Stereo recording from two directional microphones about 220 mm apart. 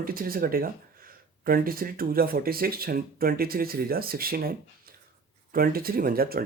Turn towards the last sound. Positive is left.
turn(degrees=-45)  # may be behind; listen again after turning